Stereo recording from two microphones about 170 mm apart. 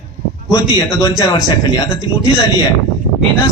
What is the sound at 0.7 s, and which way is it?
Speech, 20° left (ahead or behind).